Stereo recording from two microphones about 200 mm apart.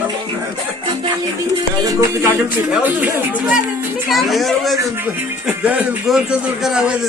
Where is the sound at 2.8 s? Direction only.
5° right (ahead or behind).